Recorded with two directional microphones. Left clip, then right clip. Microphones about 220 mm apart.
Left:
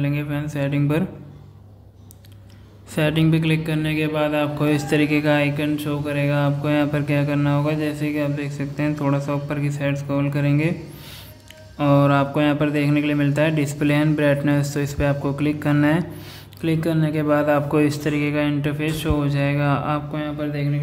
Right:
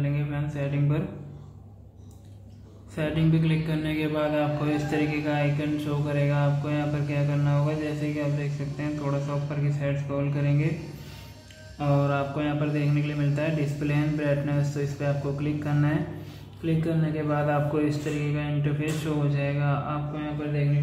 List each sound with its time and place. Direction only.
0.0 s a man's voice: 45° left (ahead or behind)
3.0 s a man's voice: 40° left (ahead or behind)
11.8 s a man's voice: 50° left (ahead or behind)